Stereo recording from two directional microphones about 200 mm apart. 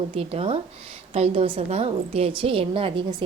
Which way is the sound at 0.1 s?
30° right (ahead or behind).